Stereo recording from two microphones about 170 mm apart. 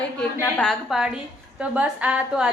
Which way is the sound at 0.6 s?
Centre (ahead or behind).